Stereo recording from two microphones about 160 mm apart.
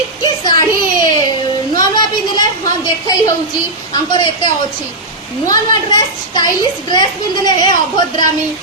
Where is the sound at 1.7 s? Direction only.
25° left (ahead or behind).